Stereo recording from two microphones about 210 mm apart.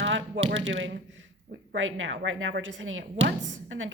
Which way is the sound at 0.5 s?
65° right (ahead or behind).